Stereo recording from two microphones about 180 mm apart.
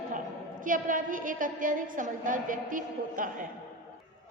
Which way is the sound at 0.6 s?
50° right (ahead or behind).